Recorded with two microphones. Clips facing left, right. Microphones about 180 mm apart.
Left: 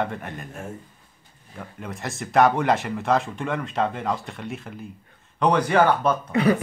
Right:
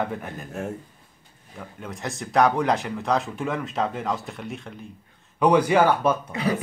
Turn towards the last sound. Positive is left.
turn(degrees=60)  # may be behind; listen again after turning